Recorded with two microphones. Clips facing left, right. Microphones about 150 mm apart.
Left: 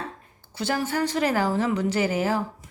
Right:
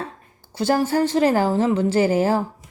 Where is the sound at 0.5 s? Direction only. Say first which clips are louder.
Right 7 dB; 35° right (ahead or behind).